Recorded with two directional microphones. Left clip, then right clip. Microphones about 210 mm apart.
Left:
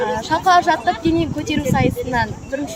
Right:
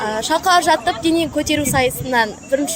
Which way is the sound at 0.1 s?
55° right (ahead or behind).